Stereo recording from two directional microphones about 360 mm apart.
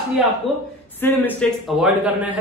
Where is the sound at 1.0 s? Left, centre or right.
Centre.